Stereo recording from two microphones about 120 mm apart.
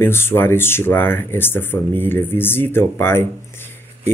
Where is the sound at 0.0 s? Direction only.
20° left (ahead or behind).